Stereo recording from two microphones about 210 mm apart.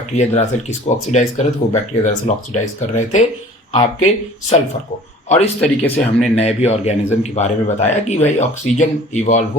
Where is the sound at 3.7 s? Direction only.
30° left (ahead or behind).